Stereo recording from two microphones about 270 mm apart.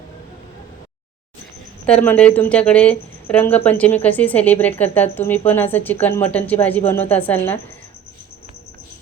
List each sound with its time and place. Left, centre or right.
1.9 s speech: centre